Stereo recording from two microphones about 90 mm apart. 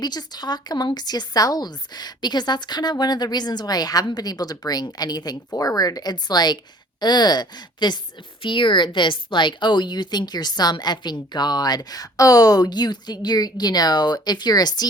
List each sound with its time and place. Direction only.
0.0 s a woman's voice: 50° left (ahead or behind)